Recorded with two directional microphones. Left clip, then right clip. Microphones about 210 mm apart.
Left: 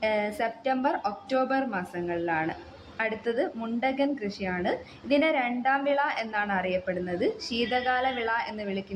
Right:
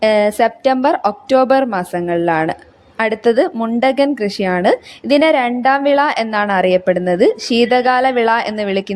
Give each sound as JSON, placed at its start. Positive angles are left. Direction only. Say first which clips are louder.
{"t": 0.0, "sound": "a woman's voice", "louder": "right 15 dB", "side_deg": -45}